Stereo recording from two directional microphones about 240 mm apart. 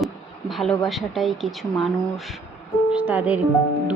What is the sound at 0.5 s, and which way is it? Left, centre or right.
Speech, centre.